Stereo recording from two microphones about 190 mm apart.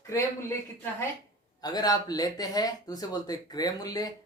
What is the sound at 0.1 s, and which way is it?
Speech, 15° left (ahead or behind).